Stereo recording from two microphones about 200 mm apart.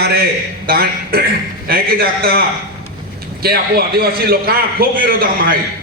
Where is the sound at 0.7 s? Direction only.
50° right (ahead or behind).